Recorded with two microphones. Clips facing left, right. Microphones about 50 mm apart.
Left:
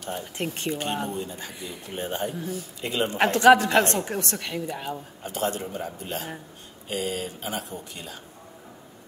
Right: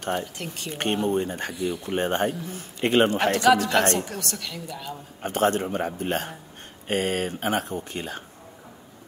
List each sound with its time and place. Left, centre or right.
0.4 s a woman's voice: left
1.0 s speech: right
3.3 s a woman's voice: left
5.2 s speech: right